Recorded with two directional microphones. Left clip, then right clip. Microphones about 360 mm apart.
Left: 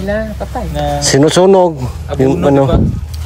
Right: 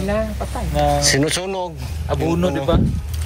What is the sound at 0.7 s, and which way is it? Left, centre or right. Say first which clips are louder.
A man's voice: left 3 dB; centre.